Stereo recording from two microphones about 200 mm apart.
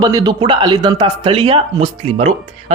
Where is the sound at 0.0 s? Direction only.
20° right (ahead or behind).